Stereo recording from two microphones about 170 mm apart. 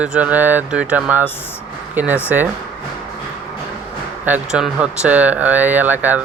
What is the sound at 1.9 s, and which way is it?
Speech, 10° right (ahead or behind).